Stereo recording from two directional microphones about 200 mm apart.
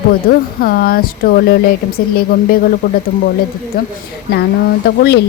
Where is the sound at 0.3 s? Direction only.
50° left (ahead or behind).